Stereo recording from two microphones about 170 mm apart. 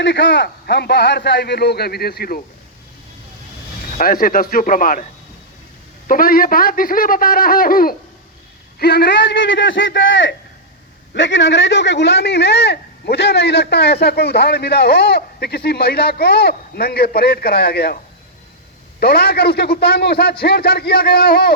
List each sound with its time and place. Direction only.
0.0 s a man's voice: 90° left; by 2.4 s 65° left (ahead or behind)
3.9 s a man's voice: 55° left (ahead or behind)
6.1 s a man's voice: 55° left (ahead or behind)
8.8 s a man's voice: 70° left (ahead or behind)